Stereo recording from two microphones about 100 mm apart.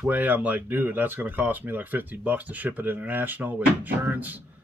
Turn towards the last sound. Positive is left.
turn(degrees=-15)  # may be behind; listen again after turning